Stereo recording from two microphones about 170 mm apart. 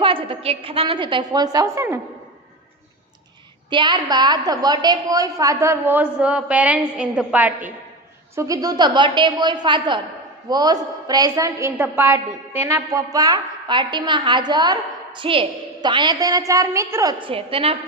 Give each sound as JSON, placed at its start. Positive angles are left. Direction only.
{"t": 0.0, "sound": "a woman's voice", "side_deg": -30}
{"t": 3.7, "sound": "a woman's voice", "side_deg": -25}
{"t": 8.4, "sound": "a woman's voice", "side_deg": -20}